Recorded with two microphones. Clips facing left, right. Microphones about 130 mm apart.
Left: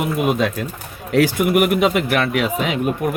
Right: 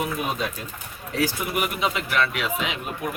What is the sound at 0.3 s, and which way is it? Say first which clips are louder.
A man's voice: left 9 dB; 75° left (ahead or behind).